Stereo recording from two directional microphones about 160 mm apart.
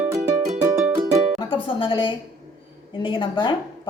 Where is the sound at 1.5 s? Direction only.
30° left (ahead or behind).